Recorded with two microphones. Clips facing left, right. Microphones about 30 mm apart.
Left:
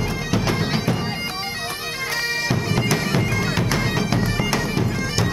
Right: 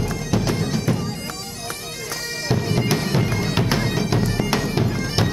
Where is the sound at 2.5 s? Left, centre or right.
Centre.